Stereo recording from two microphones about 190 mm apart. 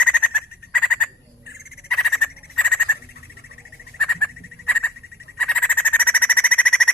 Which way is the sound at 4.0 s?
5° left (ahead or behind).